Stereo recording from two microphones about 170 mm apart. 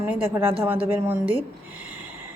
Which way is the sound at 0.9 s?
10° right (ahead or behind).